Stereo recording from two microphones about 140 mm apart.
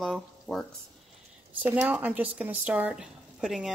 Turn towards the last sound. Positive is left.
turn(degrees=-5)  # may be behind; listen again after turning